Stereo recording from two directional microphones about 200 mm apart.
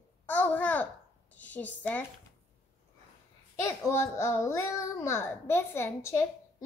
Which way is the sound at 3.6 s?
15° left (ahead or behind).